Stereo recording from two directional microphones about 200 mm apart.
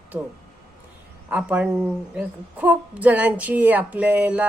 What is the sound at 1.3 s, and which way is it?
A woman's voice, 5° right (ahead or behind).